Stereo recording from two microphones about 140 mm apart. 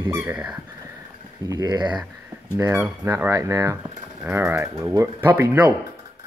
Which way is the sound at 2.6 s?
15° right (ahead or behind).